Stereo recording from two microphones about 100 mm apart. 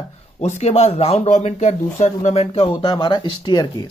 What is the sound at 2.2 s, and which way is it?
Speech, 90° left.